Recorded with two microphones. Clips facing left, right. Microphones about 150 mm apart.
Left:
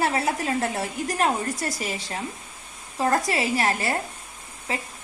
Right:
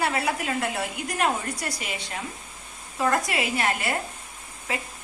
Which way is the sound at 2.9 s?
35° left (ahead or behind).